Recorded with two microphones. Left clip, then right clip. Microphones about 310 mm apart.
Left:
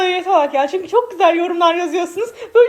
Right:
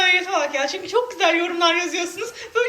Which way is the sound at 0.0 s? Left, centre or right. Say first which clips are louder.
Left 4 dB; centre.